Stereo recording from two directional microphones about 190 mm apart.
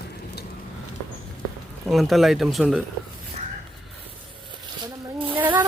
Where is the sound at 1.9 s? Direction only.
Centre (ahead or behind).